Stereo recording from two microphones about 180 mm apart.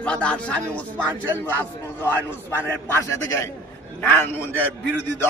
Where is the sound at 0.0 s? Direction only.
5° left (ahead or behind).